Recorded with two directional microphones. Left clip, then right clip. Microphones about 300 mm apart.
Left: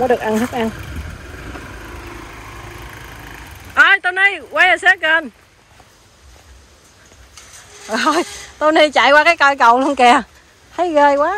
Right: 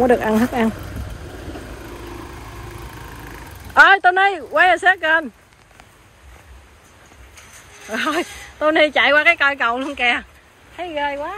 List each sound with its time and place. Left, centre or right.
0.2 s speech: right
3.3 s speech: centre
7.9 s speech: centre
10.8 s speech: left